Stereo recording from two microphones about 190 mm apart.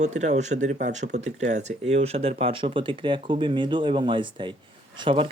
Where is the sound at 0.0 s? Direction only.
40° right (ahead or behind).